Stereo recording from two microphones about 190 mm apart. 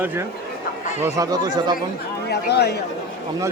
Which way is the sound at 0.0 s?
10° right (ahead or behind).